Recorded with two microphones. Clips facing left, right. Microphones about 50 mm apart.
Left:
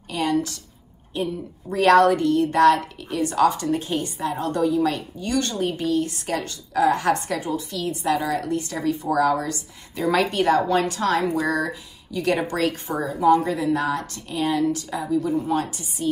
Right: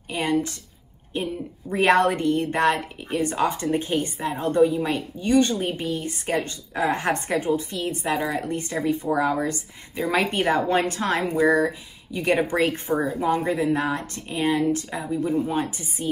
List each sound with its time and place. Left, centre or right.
0.1 s a woman's voice: right
10.2 s a woman's voice: right